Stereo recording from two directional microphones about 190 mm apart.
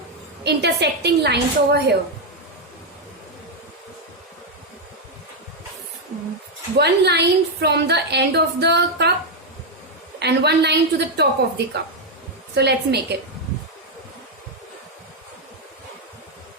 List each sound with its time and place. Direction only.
0.4 s a woman's voice: 60° right (ahead or behind)
6.7 s a woman's voice: 60° right (ahead or behind)
10.2 s a woman's voice: 60° right (ahead or behind)